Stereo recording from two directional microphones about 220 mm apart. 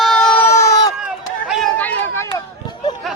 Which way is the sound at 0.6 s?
15° left (ahead or behind).